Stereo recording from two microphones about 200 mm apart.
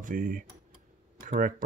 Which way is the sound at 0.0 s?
40° right (ahead or behind).